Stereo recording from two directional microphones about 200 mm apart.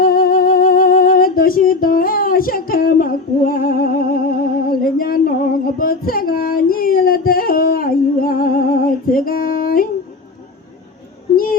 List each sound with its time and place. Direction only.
0.0 s music: 45° left (ahead or behind)
5.8 s female singing: 45° left (ahead or behind)